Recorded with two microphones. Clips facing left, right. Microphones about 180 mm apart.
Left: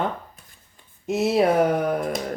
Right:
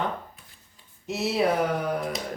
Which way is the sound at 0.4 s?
45° left (ahead or behind).